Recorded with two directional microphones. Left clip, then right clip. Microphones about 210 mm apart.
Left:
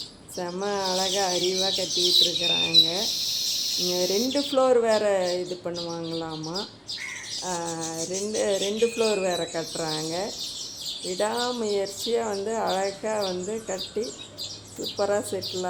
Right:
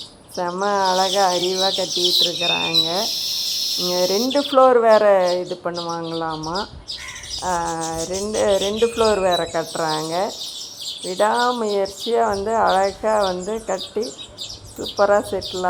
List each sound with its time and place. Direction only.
0.3 s speech: centre (ahead or behind)